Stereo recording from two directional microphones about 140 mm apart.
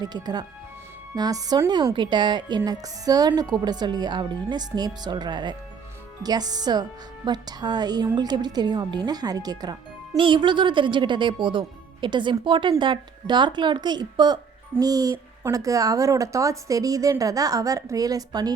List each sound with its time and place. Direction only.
0.0 s a woman's voice: 30° right (ahead or behind)